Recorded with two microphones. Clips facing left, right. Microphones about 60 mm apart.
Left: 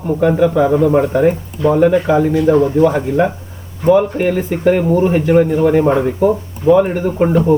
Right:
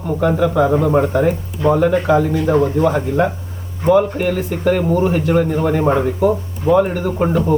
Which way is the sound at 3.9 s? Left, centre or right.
Centre.